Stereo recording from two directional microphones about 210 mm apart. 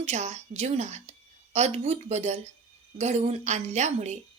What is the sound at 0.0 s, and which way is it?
A woman's voice, 30° right (ahead or behind).